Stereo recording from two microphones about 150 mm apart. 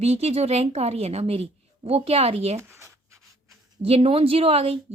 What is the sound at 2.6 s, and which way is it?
Writing, 20° right (ahead or behind).